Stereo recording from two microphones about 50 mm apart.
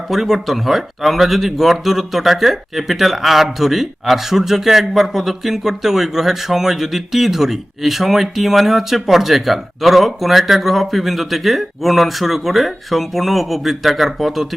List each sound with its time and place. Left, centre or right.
0.1 s speech: centre